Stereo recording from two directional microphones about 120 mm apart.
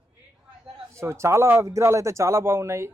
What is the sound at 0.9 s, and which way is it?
A man's voice, 25° right (ahead or behind).